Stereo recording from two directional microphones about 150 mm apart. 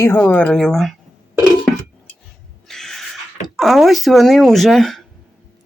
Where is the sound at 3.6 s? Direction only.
Centre (ahead or behind).